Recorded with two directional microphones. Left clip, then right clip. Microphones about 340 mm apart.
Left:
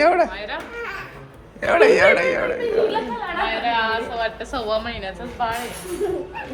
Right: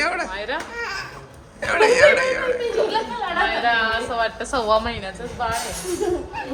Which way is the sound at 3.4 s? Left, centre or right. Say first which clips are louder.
Right 1 dB; right.